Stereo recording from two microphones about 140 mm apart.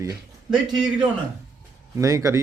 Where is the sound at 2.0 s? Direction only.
20° right (ahead or behind).